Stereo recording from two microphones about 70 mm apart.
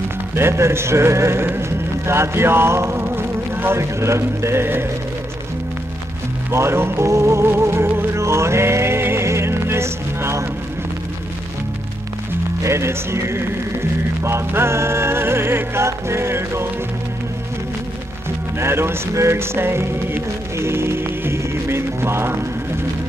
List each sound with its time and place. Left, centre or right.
0.4 s speech: right
6.5 s music: right
12.6 s music: right
18.6 s music: right